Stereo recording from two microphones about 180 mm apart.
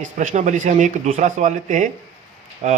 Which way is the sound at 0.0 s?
45° right (ahead or behind).